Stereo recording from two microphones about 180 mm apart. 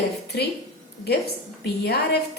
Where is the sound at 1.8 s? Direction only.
60° left (ahead or behind).